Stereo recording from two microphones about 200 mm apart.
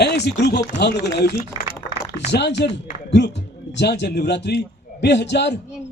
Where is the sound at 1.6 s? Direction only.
20° right (ahead or behind).